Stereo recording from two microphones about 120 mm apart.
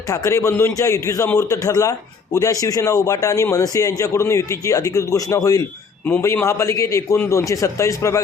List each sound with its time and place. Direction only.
0.1 s speech: 25° left (ahead or behind)